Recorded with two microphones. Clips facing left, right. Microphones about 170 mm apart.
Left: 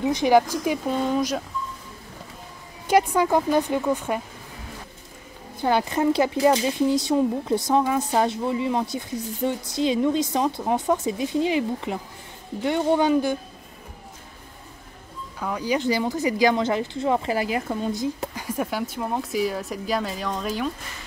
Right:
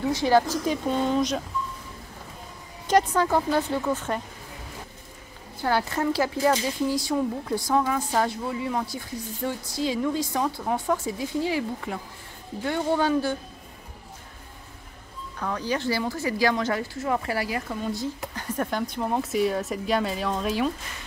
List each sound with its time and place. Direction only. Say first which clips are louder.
0.0 s speech: left 3 dB; 15° left (ahead or behind)
2.9 s speech: left 2 dB; 10° left (ahead or behind)
5.6 s speech: left 3 dB; 20° left (ahead or behind)
15.3 s speech: left 3 dB; 10° left (ahead or behind)